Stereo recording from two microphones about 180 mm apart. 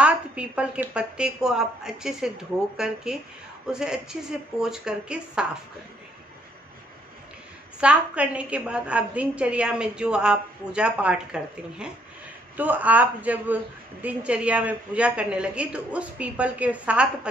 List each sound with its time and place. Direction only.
0.0 s a woman's voice: 5° right (ahead or behind)
7.8 s a woman's voice: 5° right (ahead or behind)